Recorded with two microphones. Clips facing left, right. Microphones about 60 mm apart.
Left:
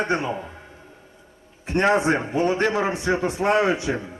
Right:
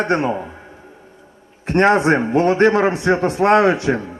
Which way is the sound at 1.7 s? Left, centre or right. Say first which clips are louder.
Right 5 dB; right.